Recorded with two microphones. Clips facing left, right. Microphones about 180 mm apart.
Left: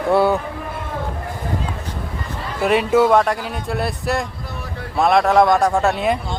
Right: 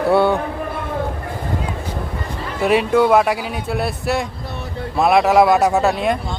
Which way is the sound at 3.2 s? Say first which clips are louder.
Right 1 dB; 5° right (ahead or behind).